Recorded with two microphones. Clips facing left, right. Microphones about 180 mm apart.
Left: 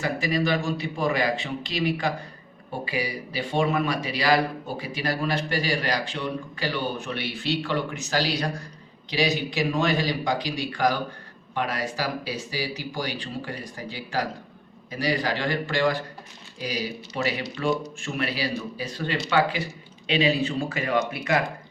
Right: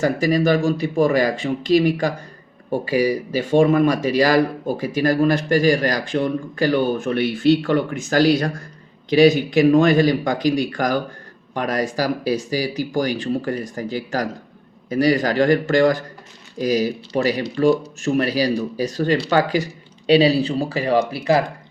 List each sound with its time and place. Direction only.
0.0 s a man's voice: 40° right (ahead or behind)